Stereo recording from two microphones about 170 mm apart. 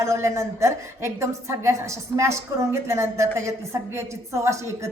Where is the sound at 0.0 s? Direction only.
15° right (ahead or behind).